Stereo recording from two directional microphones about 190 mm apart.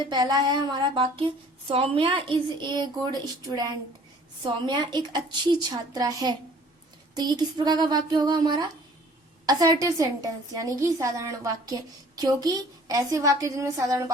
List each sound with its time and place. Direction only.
0.1 s a woman's voice: 20° right (ahead or behind)